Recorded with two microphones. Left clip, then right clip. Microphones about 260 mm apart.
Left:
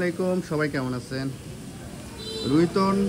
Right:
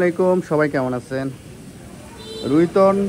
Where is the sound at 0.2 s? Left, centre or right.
Right.